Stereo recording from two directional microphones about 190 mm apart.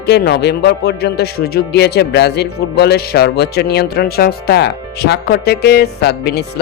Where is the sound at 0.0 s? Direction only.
60° left (ahead or behind).